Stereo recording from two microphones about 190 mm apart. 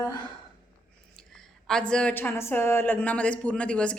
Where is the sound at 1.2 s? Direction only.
5° left (ahead or behind).